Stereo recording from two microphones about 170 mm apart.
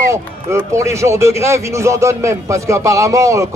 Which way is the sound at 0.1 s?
15° right (ahead or behind).